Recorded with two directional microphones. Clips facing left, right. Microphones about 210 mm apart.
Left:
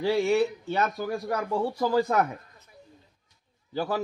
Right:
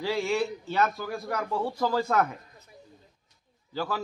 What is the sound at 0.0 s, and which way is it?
A man's voice, 20° left (ahead or behind).